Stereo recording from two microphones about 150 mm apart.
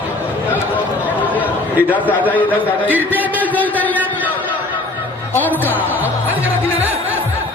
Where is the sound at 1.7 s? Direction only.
10° right (ahead or behind).